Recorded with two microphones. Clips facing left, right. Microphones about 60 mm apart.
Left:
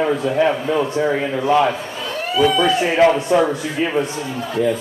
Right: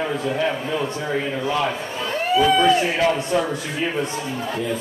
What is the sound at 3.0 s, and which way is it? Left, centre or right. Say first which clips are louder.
Speech: left 6 dB; left.